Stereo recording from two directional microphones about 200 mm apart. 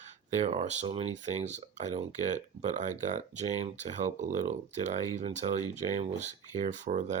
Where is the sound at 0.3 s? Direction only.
35° right (ahead or behind).